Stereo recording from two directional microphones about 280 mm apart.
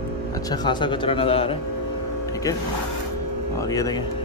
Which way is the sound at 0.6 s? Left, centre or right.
Centre.